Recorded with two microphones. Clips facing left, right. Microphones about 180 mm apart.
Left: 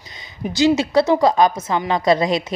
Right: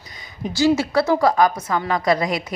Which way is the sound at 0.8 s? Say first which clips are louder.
Left 3 dB; 20° left (ahead or behind).